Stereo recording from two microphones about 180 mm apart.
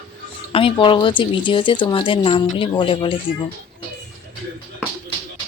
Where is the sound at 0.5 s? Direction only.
30° left (ahead or behind).